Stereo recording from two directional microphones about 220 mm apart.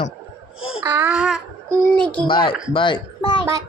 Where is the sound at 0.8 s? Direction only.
10° right (ahead or behind).